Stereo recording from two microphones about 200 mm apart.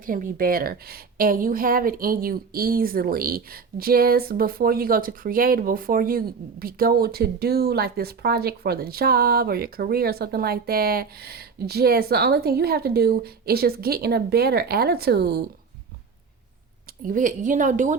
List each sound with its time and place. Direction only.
0.0 s a woman's voice: 40° right (ahead or behind)
17.0 s a woman's voice: 40° right (ahead or behind)